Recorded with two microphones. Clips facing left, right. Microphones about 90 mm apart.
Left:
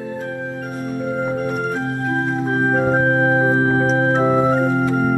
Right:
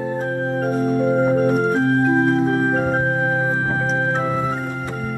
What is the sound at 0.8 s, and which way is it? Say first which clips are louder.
Organ: right 5 dB; 40° right (ahead or behind).